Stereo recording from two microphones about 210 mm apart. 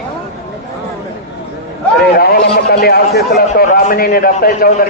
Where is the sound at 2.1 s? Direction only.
45° left (ahead or behind).